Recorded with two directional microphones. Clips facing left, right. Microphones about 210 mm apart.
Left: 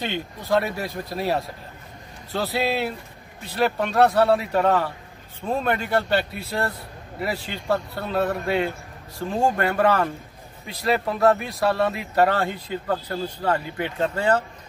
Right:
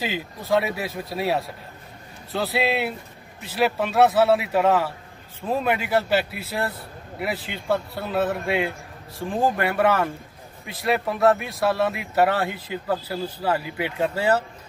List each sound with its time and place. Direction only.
0.0 s speech: centre (ahead or behind)